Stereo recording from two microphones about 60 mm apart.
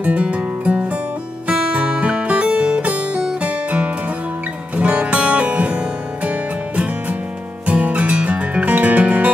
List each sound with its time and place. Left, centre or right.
0.0 s music: right
7.6 s music: right